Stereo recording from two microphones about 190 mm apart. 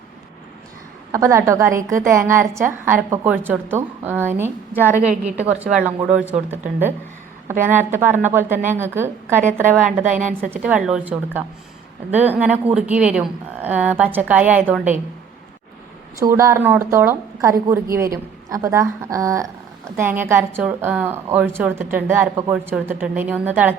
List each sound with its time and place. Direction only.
1.1 s a woman's voice: 15° right (ahead or behind)
10.2 s a woman's voice: 40° right (ahead or behind)
10.5 s a woman's voice: 5° right (ahead or behind)
16.2 s a woman's voice: 15° right (ahead or behind)